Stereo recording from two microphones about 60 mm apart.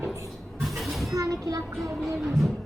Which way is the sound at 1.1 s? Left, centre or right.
Right.